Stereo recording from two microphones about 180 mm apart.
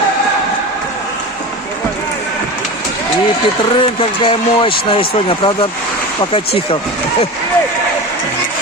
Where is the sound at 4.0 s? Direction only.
30° left (ahead or behind).